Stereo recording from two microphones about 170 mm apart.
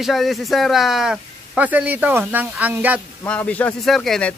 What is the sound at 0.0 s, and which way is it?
A man's voice, centre (ahead or behind).